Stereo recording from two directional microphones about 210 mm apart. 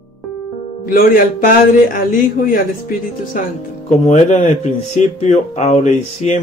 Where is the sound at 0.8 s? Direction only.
45° left (ahead or behind).